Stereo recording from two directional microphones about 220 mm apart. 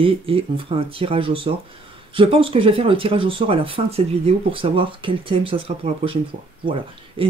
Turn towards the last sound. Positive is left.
turn(degrees=-25)  # may be behind; listen again after turning